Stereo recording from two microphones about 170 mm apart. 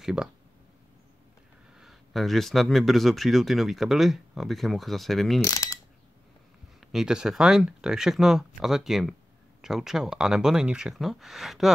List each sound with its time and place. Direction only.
0.0 s speech: 5° right (ahead or behind)
1.8 s speech: centre (ahead or behind)
5.4 s speech: 20° left (ahead or behind)
6.9 s speech: 5° right (ahead or behind)